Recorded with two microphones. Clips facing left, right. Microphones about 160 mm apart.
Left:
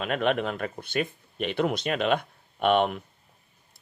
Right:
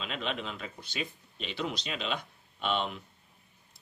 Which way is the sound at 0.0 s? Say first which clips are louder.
Left 10 dB; 55° left (ahead or behind).